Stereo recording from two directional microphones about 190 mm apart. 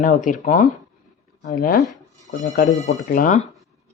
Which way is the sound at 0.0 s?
45° left (ahead or behind).